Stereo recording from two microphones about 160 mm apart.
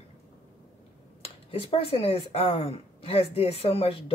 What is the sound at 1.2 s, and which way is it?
Speech, 35° left (ahead or behind).